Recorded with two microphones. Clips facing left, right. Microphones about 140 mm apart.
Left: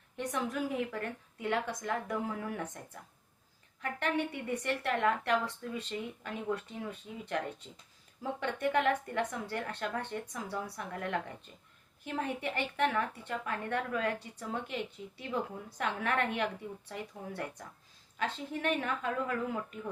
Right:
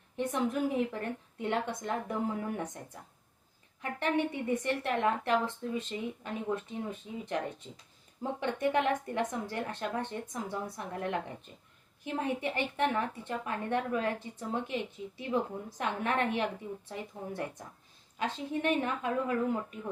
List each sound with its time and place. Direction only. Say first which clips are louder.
0.2 s a woman's voice: right 4 dB; 25° right (ahead or behind)